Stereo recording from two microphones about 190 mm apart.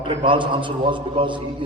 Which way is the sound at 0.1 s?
30° right (ahead or behind).